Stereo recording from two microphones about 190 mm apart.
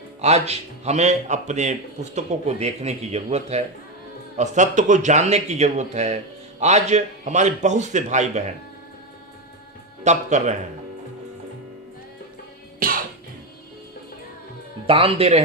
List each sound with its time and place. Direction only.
0.2 s speech: 35° right (ahead or behind)
10.0 s speech: 40° right (ahead or behind)
12.8 s music: 50° right (ahead or behind)
14.8 s speech: 30° right (ahead or behind)